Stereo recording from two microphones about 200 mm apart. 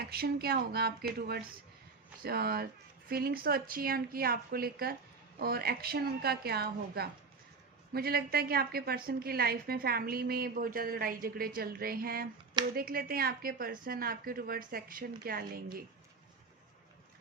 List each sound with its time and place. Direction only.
0.1 s a woman's voice: 50° right (ahead or behind)